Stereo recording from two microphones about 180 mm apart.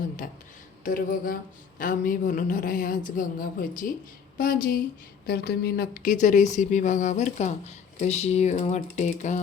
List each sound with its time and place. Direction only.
0.9 s speech: 50° left (ahead or behind)